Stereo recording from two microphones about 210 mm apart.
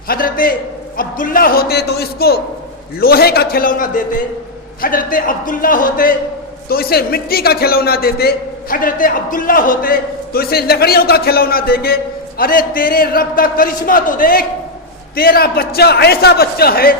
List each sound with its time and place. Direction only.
0.1 s a man's voice: 45° left (ahead or behind)